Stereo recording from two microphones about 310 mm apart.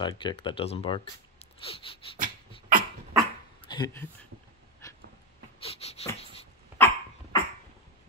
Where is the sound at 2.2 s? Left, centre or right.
Right.